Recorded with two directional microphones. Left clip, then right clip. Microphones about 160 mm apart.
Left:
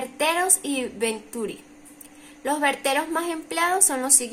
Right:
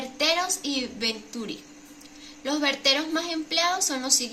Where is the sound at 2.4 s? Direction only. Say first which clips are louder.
Left 1 dB; 75° left (ahead or behind).